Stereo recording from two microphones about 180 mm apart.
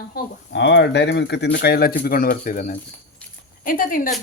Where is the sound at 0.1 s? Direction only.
75° left (ahead or behind); by 4.1 s 50° left (ahead or behind).